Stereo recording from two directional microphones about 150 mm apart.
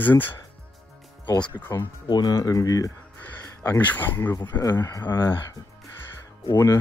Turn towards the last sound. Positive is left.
turn(degrees=20)  # may be behind; listen again after turning